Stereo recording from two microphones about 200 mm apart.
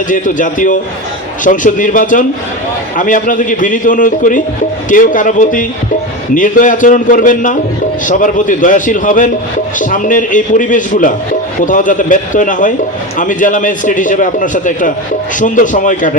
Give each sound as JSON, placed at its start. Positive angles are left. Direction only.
{"t": 0.1, "sound": "a man's voice", "side_deg": 40}